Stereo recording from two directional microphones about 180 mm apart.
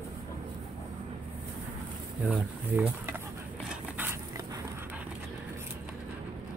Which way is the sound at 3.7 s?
10° right (ahead or behind).